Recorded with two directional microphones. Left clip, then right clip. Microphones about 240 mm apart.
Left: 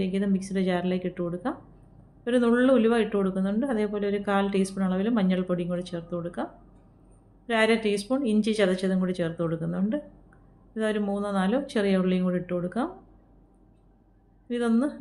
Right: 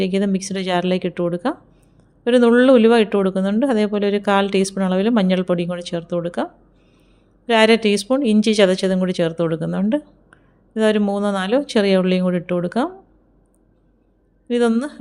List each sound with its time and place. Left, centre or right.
0.0 s speech: right
14.4 s a woman's voice: right